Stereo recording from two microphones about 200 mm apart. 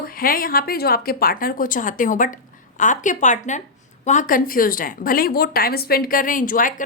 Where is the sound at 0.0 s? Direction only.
45° left (ahead or behind).